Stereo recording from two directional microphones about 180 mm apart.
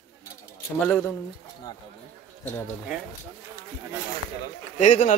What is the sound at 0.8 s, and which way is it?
Speech, 10° left (ahead or behind).